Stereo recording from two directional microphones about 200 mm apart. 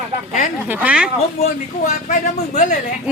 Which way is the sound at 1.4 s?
35° left (ahead or behind).